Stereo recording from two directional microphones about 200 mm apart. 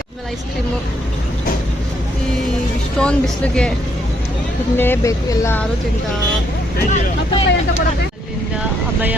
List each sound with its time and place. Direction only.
3.0 s speech: 5° left (ahead or behind)
4.8 s speech: 15° left (ahead or behind)
6.9 s vehicle: 35° left (ahead or behind)